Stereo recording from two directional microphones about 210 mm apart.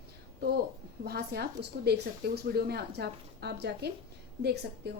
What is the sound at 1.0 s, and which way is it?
A woman's voice, 50° right (ahead or behind).